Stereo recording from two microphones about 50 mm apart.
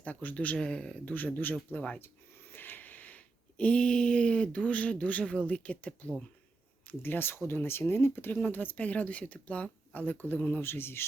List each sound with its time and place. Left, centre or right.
0.0 s speech: left
0.5 s speech: centre
1.0 s speech: left
2.0 s a sound: left
5.2 s speech: left
6.8 s speech: left
10.0 s speech: left
10.6 s speech: left